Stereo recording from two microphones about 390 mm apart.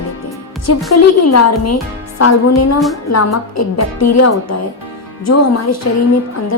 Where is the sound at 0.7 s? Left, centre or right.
Left.